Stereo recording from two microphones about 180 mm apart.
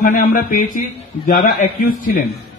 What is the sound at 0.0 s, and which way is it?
A man's voice, 50° left (ahead or behind).